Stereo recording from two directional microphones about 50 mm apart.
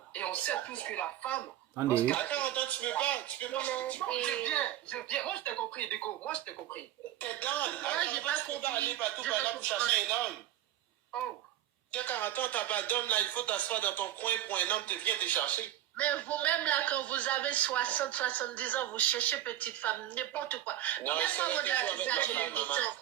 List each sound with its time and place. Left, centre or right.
0.1 s speech: left
9.2 s speech: left
11.9 s speech: left